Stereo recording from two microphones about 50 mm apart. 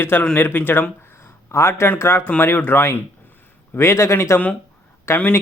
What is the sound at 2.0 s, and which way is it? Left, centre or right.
Speech, left.